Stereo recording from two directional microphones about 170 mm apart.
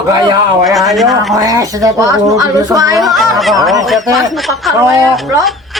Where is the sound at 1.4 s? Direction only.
20° right (ahead or behind).